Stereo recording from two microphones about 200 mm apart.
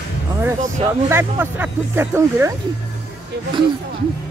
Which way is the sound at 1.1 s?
10° right (ahead or behind).